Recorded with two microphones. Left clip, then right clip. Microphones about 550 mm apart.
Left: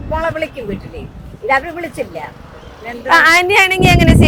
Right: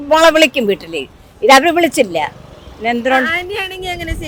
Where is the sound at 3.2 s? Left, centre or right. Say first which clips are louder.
Left 9 dB; left.